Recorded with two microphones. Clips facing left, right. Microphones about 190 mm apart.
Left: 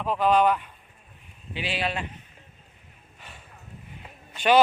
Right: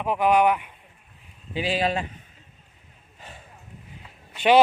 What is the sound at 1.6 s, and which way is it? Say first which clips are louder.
Speech: right 5 dB; 40° right (ahead or behind).